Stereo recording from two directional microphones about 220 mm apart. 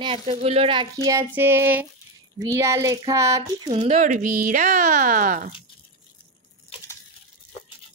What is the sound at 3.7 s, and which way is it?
Speech, 30° right (ahead or behind).